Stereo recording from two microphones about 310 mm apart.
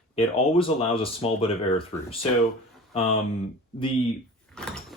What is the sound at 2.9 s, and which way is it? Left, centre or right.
Speech, centre.